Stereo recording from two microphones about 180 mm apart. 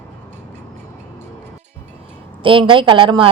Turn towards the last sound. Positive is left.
turn(degrees=-25)  # may be behind; listen again after turning